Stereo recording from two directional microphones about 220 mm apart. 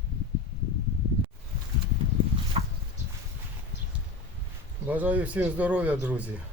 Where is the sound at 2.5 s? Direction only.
25° right (ahead or behind).